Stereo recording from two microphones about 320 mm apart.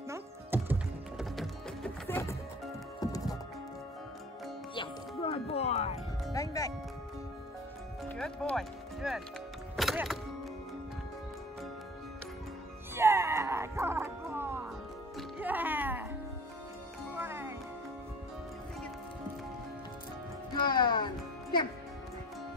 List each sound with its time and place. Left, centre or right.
0.1 s music: centre
4.7 s music: centre
6.3 s speech: centre
8.2 s speech: centre
9.8 s music: centre
12.9 s music: centre
17.1 s music: centre
20.6 s music: centre